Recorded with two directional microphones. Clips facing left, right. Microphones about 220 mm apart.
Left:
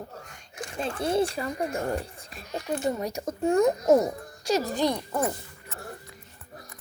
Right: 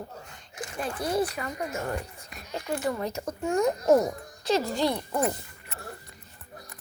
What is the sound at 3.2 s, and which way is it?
Speech, 35° left (ahead or behind).